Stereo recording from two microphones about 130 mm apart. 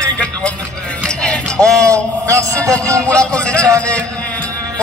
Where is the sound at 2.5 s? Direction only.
10° left (ahead or behind).